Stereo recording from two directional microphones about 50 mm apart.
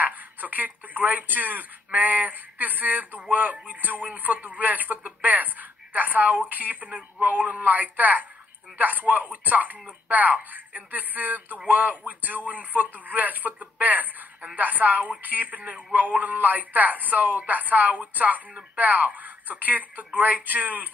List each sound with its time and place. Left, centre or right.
0.0 s speech: right